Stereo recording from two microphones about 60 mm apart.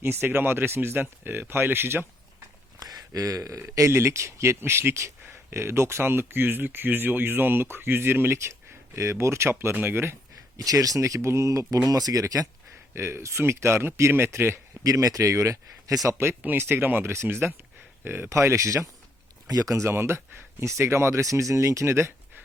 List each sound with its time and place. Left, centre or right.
0.0 s speech: right
2.7 s a sound: right
3.8 s speech: right
10.6 s speech: right
11.9 s speech: right
12.9 s speech: right
14.8 s speech: right
16.6 s speech: right
18.3 s speech: right
19.5 s speech: right
20.0 s speech: right
21.2 s speech: right